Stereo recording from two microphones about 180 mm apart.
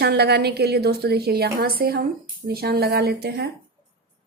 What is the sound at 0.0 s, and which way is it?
Speech, 65° right (ahead or behind).